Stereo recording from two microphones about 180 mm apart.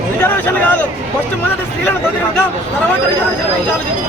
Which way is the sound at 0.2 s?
10° left (ahead or behind).